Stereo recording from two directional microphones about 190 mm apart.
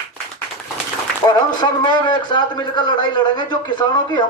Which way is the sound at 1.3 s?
20° left (ahead or behind).